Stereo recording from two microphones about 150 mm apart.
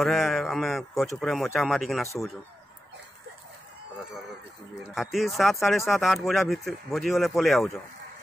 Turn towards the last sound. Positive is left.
turn(degrees=0)  # may be behind; listen again after turning